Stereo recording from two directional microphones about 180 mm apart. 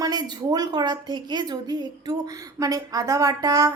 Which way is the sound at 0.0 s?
20° right (ahead or behind).